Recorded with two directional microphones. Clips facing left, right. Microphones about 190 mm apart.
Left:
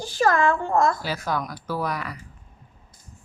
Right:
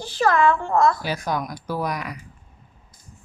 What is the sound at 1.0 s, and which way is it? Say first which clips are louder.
Speech: right 2 dB; 15° right (ahead or behind).